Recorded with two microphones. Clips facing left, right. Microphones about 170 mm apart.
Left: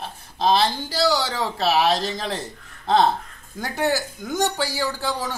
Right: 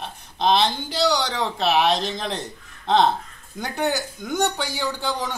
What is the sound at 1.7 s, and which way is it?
Speech, 5° left (ahead or behind).